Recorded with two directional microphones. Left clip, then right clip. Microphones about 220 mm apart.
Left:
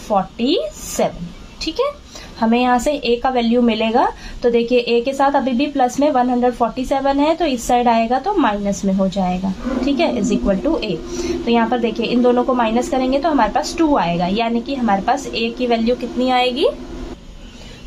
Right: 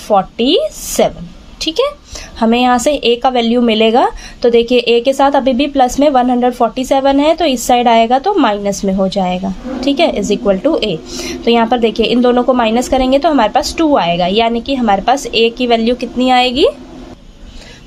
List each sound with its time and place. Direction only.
0.1 s a woman's voice: 45° right (ahead or behind)